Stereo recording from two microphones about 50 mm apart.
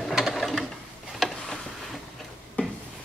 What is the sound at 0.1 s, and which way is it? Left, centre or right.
Mechanisms, centre.